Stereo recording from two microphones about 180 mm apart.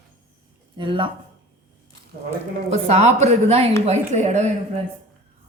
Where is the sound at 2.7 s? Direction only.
40° right (ahead or behind).